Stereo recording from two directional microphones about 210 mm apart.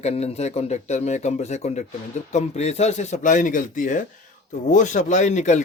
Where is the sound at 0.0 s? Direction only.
30° left (ahead or behind).